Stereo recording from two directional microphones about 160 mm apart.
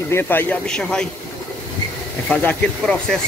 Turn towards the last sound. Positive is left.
turn(degrees=5)  # may be behind; listen again after turning